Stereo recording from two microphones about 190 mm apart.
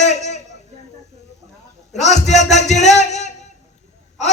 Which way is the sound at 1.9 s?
35° left (ahead or behind).